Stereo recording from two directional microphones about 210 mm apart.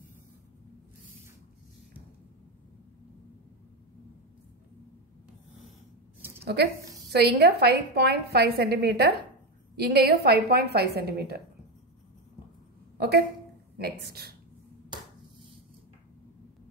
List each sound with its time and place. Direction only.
6.4 s a woman's voice: 50° right (ahead or behind)
13.7 s a woman's voice: 50° right (ahead or behind)